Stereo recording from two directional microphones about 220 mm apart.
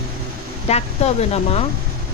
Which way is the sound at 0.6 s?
30° left (ahead or behind).